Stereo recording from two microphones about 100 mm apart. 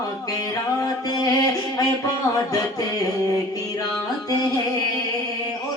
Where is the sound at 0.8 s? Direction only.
40° left (ahead or behind).